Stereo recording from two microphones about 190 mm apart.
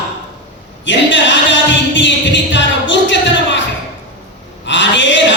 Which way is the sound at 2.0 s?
70° left (ahead or behind).